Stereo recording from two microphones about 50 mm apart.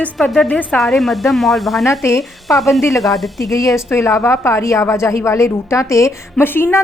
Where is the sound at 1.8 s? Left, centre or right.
Left.